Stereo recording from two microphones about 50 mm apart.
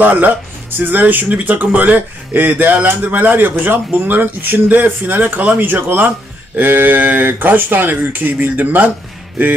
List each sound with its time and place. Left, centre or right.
0.0 s speech: right